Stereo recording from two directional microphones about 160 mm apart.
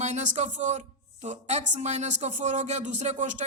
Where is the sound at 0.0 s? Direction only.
45° right (ahead or behind).